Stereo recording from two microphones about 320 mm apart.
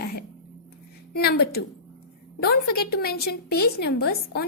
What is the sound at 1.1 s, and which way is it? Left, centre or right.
A woman's voice, left.